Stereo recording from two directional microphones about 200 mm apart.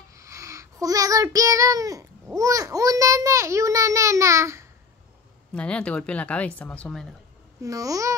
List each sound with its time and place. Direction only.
0.1 s child singing: 15° right (ahead or behind)
5.5 s speech: 5° left (ahead or behind)
7.6 s speech: 15° right (ahead or behind)